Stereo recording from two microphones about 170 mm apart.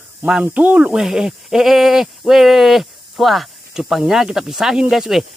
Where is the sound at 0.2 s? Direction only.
10° right (ahead or behind).